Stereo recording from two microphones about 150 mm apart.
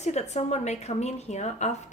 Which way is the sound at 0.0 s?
50° left (ahead or behind).